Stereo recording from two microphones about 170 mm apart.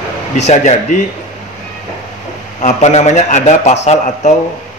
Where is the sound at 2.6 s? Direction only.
40° left (ahead or behind).